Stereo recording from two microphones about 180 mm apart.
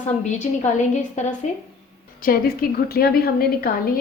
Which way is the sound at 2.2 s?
55° left (ahead or behind).